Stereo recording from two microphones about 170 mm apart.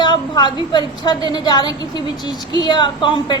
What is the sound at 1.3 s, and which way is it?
A woman's voice, 25° left (ahead or behind).